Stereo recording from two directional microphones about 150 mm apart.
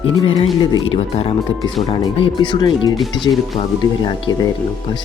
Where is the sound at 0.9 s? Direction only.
45° left (ahead or behind).